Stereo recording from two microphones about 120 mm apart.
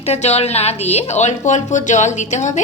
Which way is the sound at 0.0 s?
65° left (ahead or behind).